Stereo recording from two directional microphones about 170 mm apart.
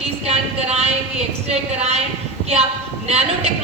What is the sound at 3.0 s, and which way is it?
Speech, 40° right (ahead or behind).